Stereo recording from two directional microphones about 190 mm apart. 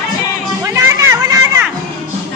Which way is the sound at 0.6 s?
15° right (ahead or behind).